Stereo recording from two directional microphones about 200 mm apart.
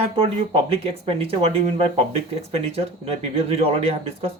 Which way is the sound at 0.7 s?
30° right (ahead or behind).